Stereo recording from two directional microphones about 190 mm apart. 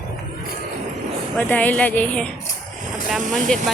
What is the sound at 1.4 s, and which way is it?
Speech, 10° left (ahead or behind).